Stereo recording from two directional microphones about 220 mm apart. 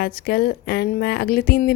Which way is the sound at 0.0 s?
45° left (ahead or behind).